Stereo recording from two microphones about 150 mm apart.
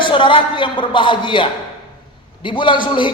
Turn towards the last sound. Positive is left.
turn(degrees=30)  # may be behind; listen again after turning